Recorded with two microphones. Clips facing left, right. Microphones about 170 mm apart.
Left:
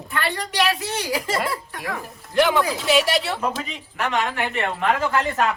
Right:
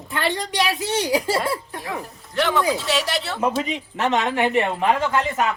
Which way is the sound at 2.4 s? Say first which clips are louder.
Left 3 dB; 10° left (ahead or behind).